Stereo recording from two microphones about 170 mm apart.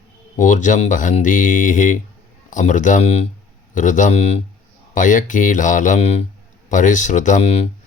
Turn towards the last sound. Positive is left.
turn(degrees=40)  # may be behind; listen again after turning